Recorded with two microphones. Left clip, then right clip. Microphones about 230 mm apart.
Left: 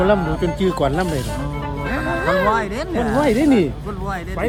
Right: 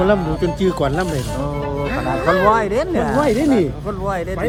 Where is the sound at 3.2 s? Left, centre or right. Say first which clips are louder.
Even; left.